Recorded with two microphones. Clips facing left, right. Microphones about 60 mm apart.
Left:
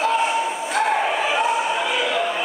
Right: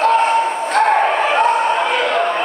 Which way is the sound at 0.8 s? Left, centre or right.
Right.